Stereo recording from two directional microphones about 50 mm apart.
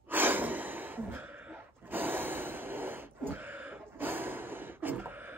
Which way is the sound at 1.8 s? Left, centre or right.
Right.